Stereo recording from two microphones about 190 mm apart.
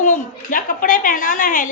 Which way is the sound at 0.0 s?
45° left (ahead or behind).